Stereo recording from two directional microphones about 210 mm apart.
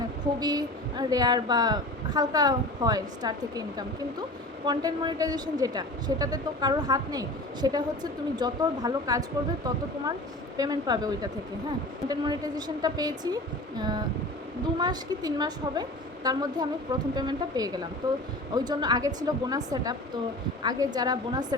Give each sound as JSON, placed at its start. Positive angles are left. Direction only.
{"t": 0.3, "sound": "a woman's voice", "side_deg": -20}